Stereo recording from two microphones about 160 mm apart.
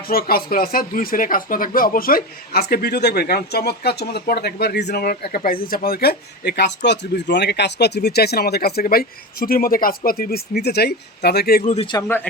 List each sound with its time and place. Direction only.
0.1 s speech: 70° left (ahead or behind)
11.6 s a man's voice: 45° left (ahead or behind)
12.0 s speech: 10° left (ahead or behind)